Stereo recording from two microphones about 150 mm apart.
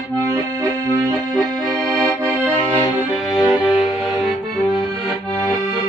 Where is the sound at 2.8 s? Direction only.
30° left (ahead or behind).